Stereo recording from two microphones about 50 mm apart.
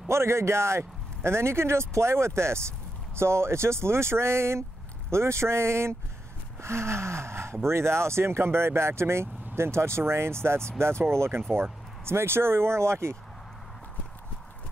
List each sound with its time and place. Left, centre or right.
0.1 s speech: right